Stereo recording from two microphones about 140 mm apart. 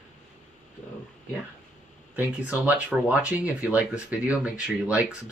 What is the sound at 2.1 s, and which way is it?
Speech, 10° right (ahead or behind).